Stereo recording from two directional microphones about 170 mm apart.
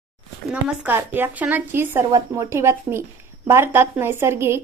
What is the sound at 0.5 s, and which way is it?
A woman's voice, 10° right (ahead or behind).